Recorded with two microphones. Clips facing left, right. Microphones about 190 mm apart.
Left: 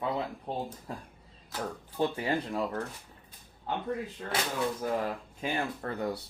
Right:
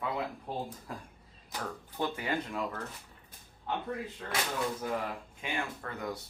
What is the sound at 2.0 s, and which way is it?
Speech, 30° left (ahead or behind).